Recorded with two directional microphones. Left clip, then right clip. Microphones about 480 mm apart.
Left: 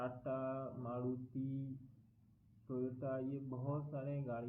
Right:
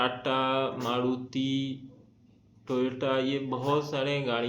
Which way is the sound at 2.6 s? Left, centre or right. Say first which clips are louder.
Right 15 dB; centre.